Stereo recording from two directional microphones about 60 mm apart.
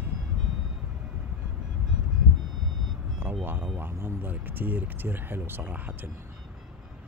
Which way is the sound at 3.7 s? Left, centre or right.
Right.